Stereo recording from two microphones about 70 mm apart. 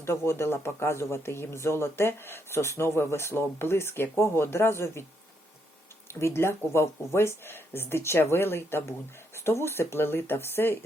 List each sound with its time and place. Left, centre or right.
0.0 s speech: left
6.1 s speech: left